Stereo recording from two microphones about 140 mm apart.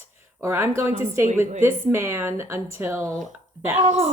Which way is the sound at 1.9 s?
15° right (ahead or behind).